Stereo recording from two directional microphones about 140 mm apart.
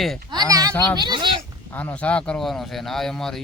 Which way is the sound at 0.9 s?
35° right (ahead or behind).